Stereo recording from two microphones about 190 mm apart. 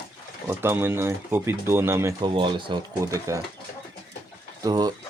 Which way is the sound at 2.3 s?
25° right (ahead or behind).